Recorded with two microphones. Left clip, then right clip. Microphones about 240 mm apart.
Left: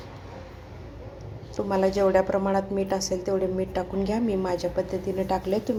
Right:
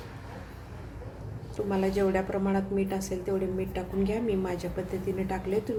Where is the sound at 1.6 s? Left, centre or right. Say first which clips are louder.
Left 5 dB; centre.